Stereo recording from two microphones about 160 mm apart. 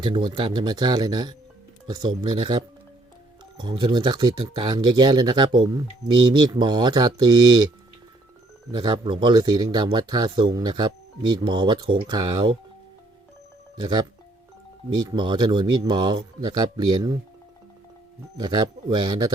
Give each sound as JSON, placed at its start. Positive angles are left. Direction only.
{"t": 0.0, "sound": "speech", "side_deg": -30}
{"t": 8.7, "sound": "speech", "side_deg": -30}
{"t": 13.7, "sound": "speech", "side_deg": -30}
{"t": 18.3, "sound": "speech", "side_deg": -25}